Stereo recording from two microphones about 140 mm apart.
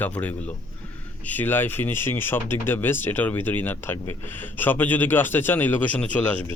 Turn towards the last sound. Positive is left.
turn(degrees=10)  # may be behind; listen again after turning